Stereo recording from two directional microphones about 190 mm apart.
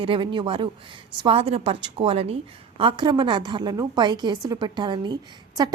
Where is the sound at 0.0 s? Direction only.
25° right (ahead or behind).